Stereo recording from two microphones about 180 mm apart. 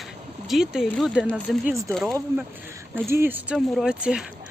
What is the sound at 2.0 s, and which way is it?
Speech, 15° right (ahead or behind).